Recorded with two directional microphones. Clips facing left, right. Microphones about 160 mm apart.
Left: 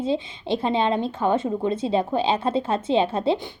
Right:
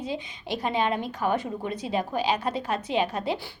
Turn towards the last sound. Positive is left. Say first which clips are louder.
# left 6 dB
turn(degrees=25)  # may be behind; listen again after turning